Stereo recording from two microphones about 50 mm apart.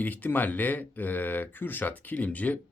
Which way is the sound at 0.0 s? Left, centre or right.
Left.